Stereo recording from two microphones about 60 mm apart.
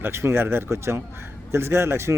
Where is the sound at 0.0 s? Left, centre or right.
Right.